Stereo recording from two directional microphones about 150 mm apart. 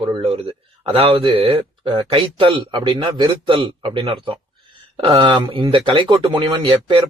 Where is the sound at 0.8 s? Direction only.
40° right (ahead or behind).